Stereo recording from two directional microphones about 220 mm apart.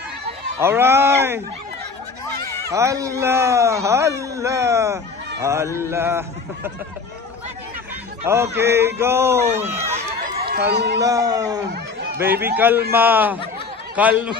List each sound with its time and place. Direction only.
0.6 s speech: 10° right (ahead or behind)
2.7 s speech: 15° right (ahead or behind)
8.3 s speech: 10° right (ahead or behind)
9.8 s run: 30° right (ahead or behind)
10.4 s speech: 45° right (ahead or behind)
11.0 s speech: 15° right (ahead or behind)